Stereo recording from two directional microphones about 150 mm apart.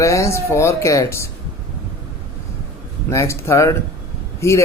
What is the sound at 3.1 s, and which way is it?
A man's voice, 20° left (ahead or behind).